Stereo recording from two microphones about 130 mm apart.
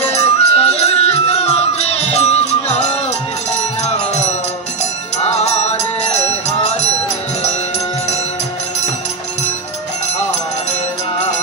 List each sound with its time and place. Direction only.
0.0 s music: 55° left (ahead or behind)
3.8 s music: 60° left (ahead or behind)